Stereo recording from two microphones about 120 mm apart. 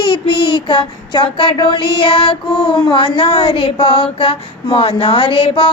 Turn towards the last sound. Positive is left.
turn(degrees=50)  # may be behind; listen again after turning